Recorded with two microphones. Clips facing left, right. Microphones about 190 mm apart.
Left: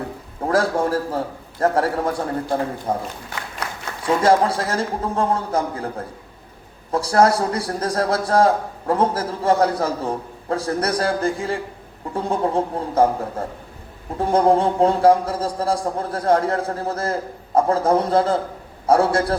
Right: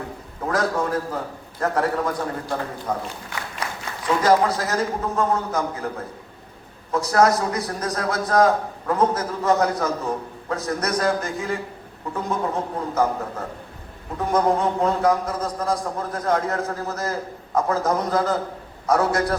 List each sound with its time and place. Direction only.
0.4 s a man's voice: 30° left (ahead or behind)
4.0 s a man's voice: 30° left (ahead or behind)
6.9 s a man's voice: 30° left (ahead or behind)
14.2 s a man's voice: 30° left (ahead or behind)